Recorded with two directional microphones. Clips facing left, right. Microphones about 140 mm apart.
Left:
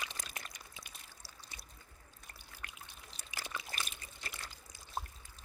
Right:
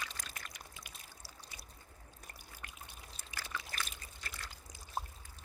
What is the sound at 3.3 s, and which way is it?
Trickle, 20° left (ahead or behind).